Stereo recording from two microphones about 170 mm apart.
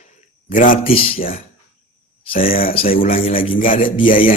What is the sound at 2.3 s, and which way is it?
Speech, 55° left (ahead or behind).